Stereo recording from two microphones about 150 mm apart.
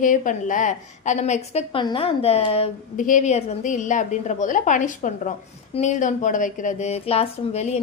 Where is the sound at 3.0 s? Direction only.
60° left (ahead or behind).